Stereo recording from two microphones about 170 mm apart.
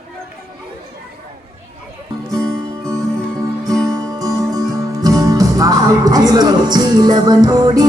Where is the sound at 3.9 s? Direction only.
20° right (ahead or behind).